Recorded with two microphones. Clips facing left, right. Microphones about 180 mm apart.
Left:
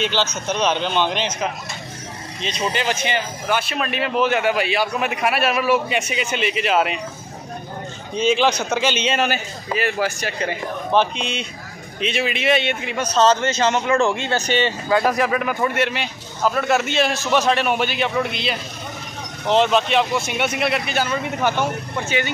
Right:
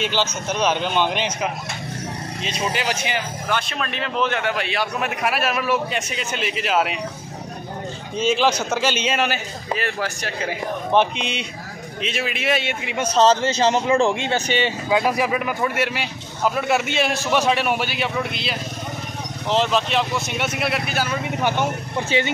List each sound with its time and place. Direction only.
0.0 s a man's voice: 10° right (ahead or behind)
3.4 s a man's voice: 5° left (ahead or behind)
8.2 s a man's voice: 5° right (ahead or behind)
10.9 s speech: 15° right (ahead or behind)
12.0 s a man's voice: centre (ahead or behind)
12.9 s speech: 30° right (ahead or behind)
14.5 s a man's voice: 10° right (ahead or behind)
21.4 s speech: 15° right (ahead or behind)